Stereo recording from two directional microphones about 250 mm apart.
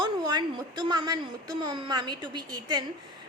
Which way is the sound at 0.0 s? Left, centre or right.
Centre.